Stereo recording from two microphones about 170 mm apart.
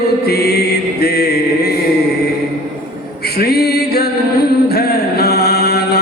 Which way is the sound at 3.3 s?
70° left (ahead or behind).